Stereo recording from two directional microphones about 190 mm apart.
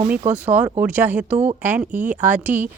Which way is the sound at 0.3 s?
10° right (ahead or behind).